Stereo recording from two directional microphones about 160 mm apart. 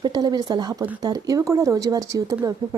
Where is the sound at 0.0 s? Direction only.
25° right (ahead or behind).